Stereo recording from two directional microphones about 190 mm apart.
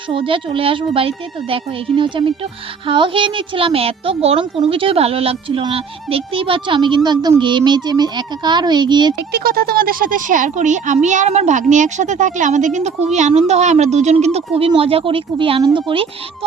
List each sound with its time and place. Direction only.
0.1 s speech: 25° right (ahead or behind)
9.3 s speech: 50° right (ahead or behind); by 16.0 s 25° right (ahead or behind)